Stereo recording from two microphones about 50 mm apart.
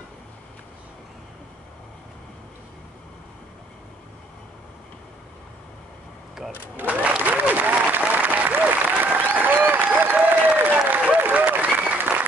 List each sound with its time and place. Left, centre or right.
6.8 s applause: right
11.1 s applause: right
11.4 s applause: right